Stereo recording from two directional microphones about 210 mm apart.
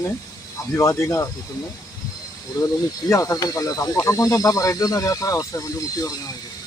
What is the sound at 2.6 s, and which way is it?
Speech, 20° left (ahead or behind).